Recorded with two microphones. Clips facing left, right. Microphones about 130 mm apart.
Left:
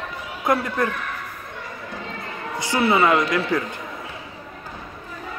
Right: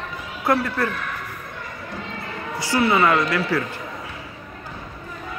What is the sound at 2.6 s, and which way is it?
Speech, 20° left (ahead or behind).